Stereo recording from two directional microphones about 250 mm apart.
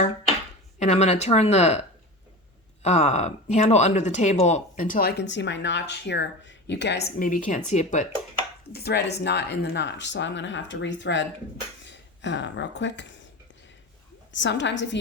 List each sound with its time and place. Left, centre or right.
0.8 s speech: left
2.8 s speech: left
7.2 s speech: left
8.7 s speech: left
14.3 s speech: left